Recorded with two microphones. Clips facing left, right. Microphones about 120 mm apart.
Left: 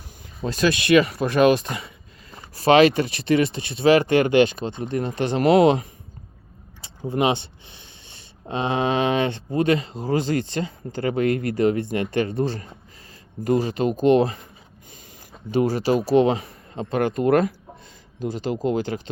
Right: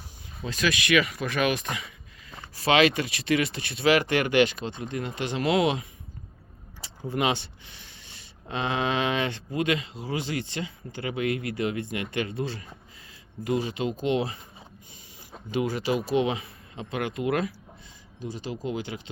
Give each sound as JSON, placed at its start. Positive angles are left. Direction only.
{"t": 0.4, "sound": "speech", "side_deg": 35}
{"t": 6.8, "sound": "speech", "side_deg": 25}
{"t": 15.5, "sound": "speech", "side_deg": 35}